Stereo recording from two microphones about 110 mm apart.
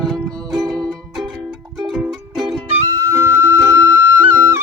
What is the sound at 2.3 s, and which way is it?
Music, centre (ahead or behind).